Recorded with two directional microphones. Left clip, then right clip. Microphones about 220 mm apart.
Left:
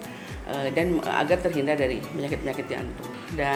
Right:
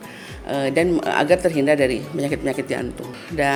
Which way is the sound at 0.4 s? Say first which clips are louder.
Right 6 dB; 55° right (ahead or behind).